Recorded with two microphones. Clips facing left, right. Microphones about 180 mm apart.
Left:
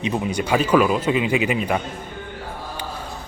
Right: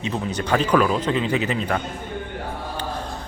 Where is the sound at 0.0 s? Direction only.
10° left (ahead or behind).